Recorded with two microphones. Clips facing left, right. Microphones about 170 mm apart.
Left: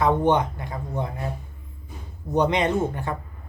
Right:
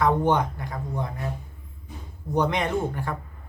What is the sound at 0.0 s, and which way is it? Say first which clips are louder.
Speech: left 2 dB; 20° left (ahead or behind).